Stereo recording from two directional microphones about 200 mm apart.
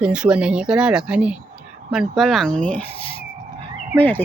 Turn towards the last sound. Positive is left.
turn(degrees=10)  # may be behind; listen again after turning